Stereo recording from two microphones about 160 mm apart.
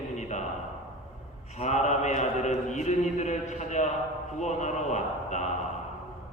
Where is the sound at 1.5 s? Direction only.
45° left (ahead or behind).